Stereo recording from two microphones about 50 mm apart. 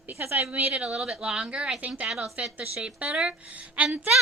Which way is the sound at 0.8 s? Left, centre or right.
Right.